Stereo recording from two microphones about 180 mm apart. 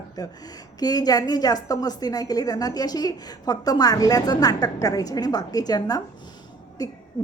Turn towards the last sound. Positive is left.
turn(degrees=20)  # may be behind; listen again after turning